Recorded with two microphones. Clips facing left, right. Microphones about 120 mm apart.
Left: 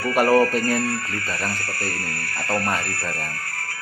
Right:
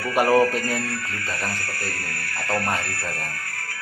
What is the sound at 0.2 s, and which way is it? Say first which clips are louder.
Speech: left 1 dB; 15° right (ahead or behind).